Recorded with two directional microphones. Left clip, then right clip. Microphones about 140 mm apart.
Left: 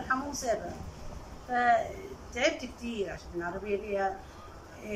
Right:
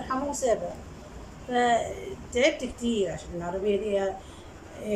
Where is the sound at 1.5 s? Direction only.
30° right (ahead or behind).